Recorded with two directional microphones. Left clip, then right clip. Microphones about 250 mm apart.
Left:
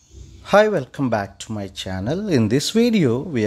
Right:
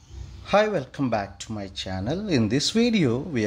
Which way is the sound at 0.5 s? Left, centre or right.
Left.